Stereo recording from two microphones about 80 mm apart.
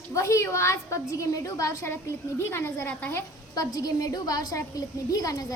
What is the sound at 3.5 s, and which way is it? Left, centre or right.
A woman's voice, left.